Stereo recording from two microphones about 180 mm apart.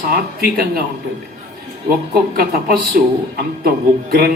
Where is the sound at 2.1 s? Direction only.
60° right (ahead or behind).